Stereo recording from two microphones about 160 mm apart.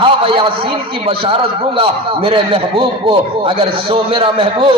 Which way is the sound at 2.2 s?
35° right (ahead or behind).